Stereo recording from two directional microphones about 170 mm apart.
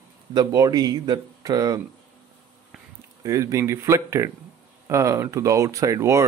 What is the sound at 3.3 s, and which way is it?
Speech, 20° right (ahead or behind).